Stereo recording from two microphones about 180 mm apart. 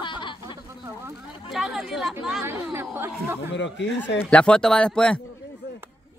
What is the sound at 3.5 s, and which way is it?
Speech, 85° left.